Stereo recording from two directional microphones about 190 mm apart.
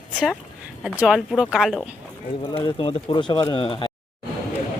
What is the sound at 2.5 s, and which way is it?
Speech, 25° left (ahead or behind).